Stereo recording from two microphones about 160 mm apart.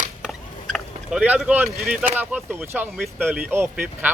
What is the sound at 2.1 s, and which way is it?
Speech, 10° right (ahead or behind).